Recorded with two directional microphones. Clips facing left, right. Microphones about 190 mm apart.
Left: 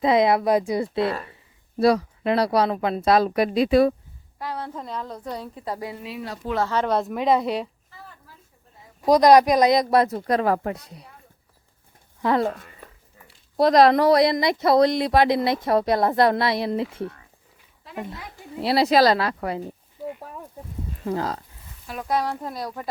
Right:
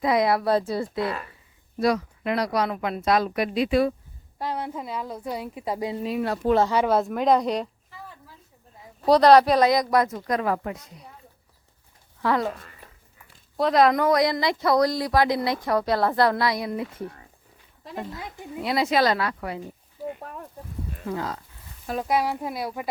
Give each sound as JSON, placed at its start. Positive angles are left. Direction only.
{"t": 0.0, "sound": "speech", "side_deg": 25}
{"t": 0.9, "sound": "speech", "side_deg": 30}
{"t": 4.4, "sound": "a woman's voice", "side_deg": -20}
{"t": 6.0, "sound": "speech", "side_deg": -50}
{"t": 6.6, "sound": "a woman's voice", "side_deg": -10}
{"t": 9.0, "sound": "speech", "side_deg": 10}
{"t": 12.2, "sound": "speech", "side_deg": 20}
{"t": 13.7, "sound": "speech", "side_deg": 35}
{"t": 18.2, "sound": "speech", "side_deg": -20}
{"t": 18.6, "sound": "speech", "side_deg": 35}
{"t": 20.2, "sound": "a woman's voice", "side_deg": 5}
{"t": 21.1, "sound": "speech", "side_deg": 40}
{"t": 22.0, "sound": "a woman's voice", "side_deg": -10}